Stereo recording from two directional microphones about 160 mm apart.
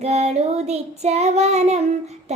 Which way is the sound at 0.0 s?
40° right (ahead or behind).